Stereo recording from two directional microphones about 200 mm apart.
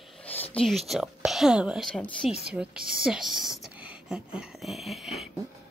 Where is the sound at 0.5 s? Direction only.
Centre (ahead or behind).